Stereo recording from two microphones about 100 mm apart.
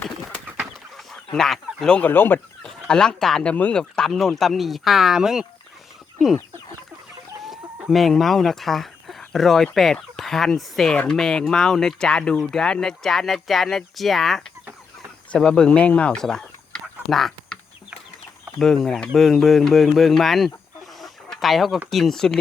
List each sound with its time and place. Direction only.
0.6 s chicken: centre (ahead or behind)
1.3 s speech: 5° left (ahead or behind)
2.0 s speech: 20° left (ahead or behind)
2.6 s speech: 5° left (ahead or behind)
7.9 s speech: centre (ahead or behind)
18.6 s speech: 5° left (ahead or behind)
21.0 s chicken: centre (ahead or behind)
21.8 s speech: 5° left (ahead or behind)